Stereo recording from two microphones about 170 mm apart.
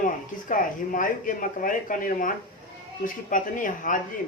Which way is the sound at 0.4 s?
50° left (ahead or behind).